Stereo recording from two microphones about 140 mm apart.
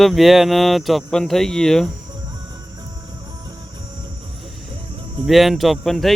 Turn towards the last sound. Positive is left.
turn(degrees=0)  # may be behind; listen again after turning